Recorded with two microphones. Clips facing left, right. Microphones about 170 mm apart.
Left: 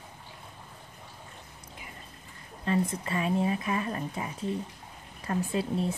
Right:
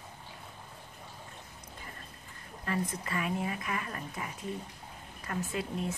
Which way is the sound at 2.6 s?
25° left (ahead or behind).